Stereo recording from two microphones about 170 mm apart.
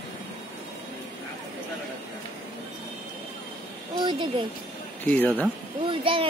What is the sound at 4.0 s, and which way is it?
Speech, 25° right (ahead or behind).